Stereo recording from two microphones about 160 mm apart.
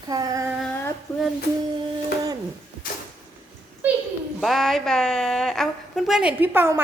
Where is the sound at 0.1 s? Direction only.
20° right (ahead or behind).